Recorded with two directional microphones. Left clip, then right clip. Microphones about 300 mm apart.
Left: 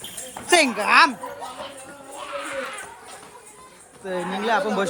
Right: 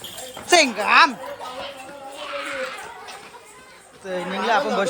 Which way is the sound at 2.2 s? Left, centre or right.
Left.